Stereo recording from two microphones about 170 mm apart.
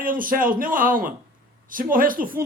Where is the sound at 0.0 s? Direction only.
55° right (ahead or behind).